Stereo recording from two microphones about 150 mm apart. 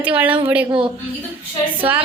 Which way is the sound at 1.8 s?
10° right (ahead or behind).